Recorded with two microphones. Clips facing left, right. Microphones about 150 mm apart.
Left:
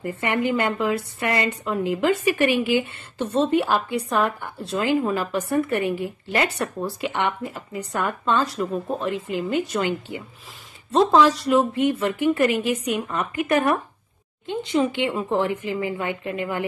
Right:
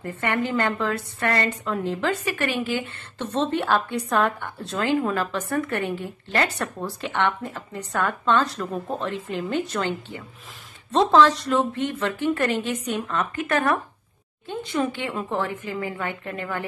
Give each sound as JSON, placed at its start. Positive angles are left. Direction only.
{"t": 0.0, "sound": "a woman's voice", "side_deg": 10}